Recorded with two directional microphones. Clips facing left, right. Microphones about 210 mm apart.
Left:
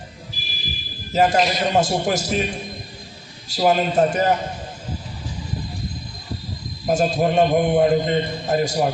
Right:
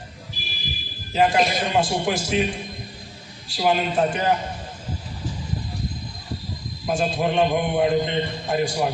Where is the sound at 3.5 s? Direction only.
40° left (ahead or behind).